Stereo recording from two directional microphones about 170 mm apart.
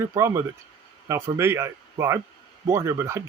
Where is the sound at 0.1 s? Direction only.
20° right (ahead or behind).